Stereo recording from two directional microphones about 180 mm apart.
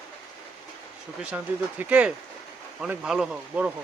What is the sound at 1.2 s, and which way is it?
Speech, 10° right (ahead or behind).